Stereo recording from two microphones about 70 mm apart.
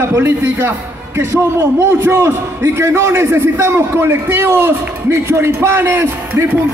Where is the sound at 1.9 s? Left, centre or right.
Right.